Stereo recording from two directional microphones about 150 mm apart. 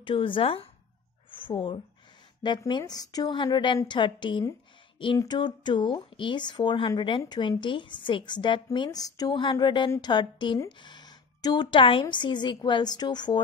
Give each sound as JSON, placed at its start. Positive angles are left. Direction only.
{"t": 0.0, "sound": "speech", "side_deg": 35}